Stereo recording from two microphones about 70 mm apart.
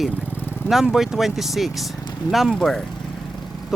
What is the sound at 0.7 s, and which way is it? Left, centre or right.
Speech, centre.